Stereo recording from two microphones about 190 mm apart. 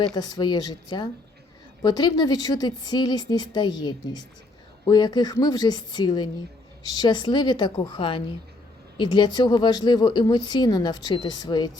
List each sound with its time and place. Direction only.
0.0 s speech: 20° left (ahead or behind)